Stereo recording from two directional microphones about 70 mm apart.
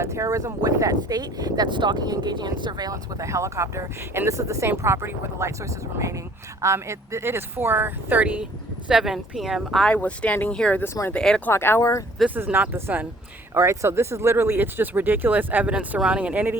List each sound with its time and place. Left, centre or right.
0.0 s speech: right
2.9 s speech: right
8.9 s speech: centre
9.8 s speech: centre
11.5 s speech: left
11.8 s speech: left
12.3 s speech: right
13.5 s speech: right; by 16.6 s centre